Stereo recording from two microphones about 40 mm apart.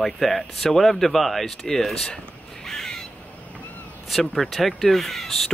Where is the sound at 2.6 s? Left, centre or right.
Centre.